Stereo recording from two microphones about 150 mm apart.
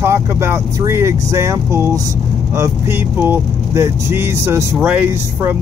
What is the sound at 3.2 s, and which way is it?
Speech, 15° right (ahead or behind).